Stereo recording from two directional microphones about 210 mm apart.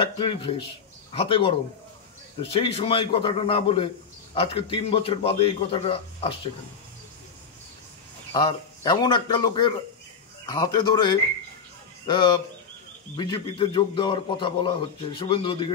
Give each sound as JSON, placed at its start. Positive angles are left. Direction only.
{"t": 0.0, "sound": "a man's voice", "side_deg": 25}
{"t": 8.3, "sound": "a man's voice", "side_deg": 20}